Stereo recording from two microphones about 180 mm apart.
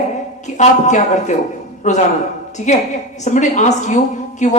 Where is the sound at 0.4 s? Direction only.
40° left (ahead or behind).